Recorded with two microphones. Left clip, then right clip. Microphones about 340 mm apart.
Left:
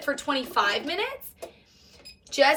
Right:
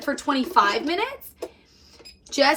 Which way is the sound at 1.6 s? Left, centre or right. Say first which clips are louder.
Right 2 dB; centre.